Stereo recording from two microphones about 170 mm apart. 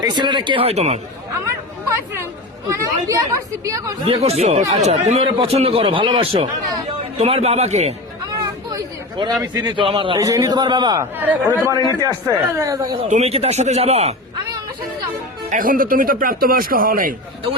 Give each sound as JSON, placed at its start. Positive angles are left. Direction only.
{"t": 0.0, "sound": "a man's voice", "side_deg": -25}
{"t": 2.7, "sound": "a man's voice", "side_deg": -20}
{"t": 4.0, "sound": "a man's voice", "side_deg": -35}
{"t": 8.7, "sound": "a sound", "side_deg": -25}
{"t": 9.4, "sound": "a man's voice", "side_deg": -25}
{"t": 11.2, "sound": "a man's voice", "side_deg": -10}
{"t": 13.1, "sound": "a man's voice", "side_deg": -40}
{"t": 15.4, "sound": "speech", "side_deg": -50}